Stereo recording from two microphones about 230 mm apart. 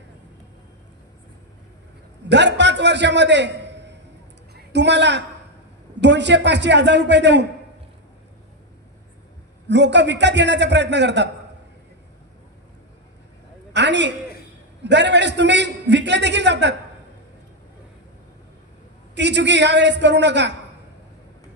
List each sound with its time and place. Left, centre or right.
2.2 s a man's voice: right
9.7 s a man's voice: right
13.7 s a man's voice: right
19.1 s a man's voice: right